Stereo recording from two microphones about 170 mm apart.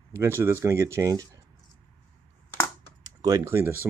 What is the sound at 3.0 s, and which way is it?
Speech, 20° right (ahead or behind).